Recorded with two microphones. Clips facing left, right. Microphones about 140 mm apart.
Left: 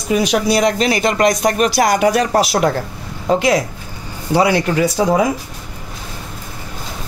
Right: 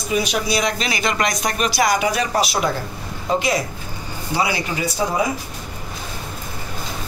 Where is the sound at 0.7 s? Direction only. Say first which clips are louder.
Left 7 dB; 40° left (ahead or behind).